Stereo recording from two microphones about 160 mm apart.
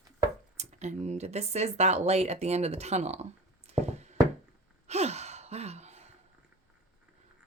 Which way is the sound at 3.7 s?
45° right (ahead or behind).